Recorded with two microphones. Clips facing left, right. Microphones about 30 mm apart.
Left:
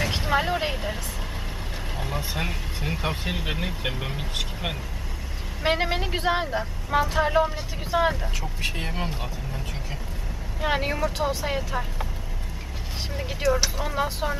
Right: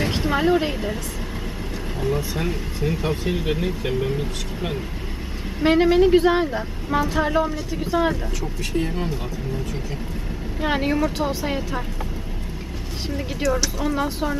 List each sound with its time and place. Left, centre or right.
0.1 s speech: centre
2.0 s speech: centre
5.6 s a woman's voice: centre
8.6 s speech: left
10.6 s a woman's voice: centre
13.8 s a woman's voice: centre